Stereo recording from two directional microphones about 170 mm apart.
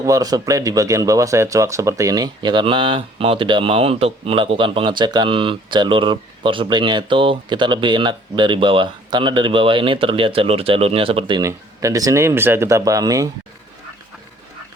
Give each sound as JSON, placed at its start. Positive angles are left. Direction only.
{"t": 0.0, "sound": "speech", "side_deg": -20}